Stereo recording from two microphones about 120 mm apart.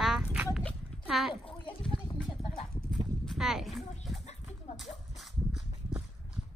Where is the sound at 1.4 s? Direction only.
45° left (ahead or behind).